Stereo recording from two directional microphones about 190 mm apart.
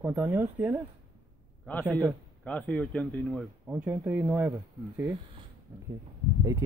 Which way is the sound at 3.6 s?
10° right (ahead or behind).